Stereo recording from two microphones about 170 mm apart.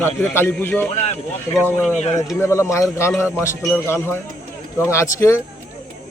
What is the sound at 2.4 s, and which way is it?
Speech, 15° left (ahead or behind).